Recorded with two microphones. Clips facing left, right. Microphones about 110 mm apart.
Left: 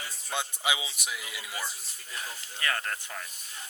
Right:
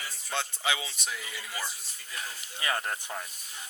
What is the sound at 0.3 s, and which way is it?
Speech, 15° left (ahead or behind).